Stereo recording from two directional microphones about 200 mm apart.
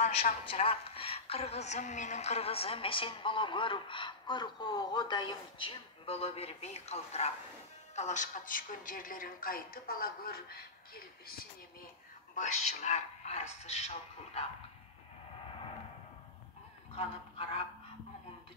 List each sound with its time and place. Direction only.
0.0 s a woman's voice: 35° left (ahead or behind)
12.4 s speech: 35° left (ahead or behind)